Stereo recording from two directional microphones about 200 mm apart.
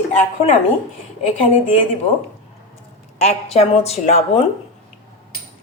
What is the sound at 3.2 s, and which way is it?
Speech, 30° left (ahead or behind).